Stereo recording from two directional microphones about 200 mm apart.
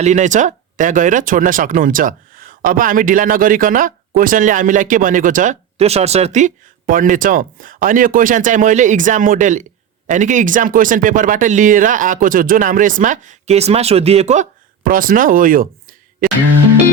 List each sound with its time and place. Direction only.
0.0 s speech: 35° right (ahead or behind)
14.8 s speech: 45° right (ahead or behind)